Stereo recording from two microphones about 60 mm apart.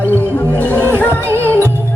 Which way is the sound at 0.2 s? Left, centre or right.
Left.